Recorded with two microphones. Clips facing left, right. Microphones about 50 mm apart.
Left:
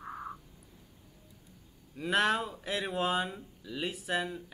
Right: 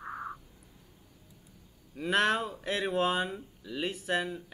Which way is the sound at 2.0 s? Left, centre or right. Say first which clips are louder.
Right 1 dB; centre.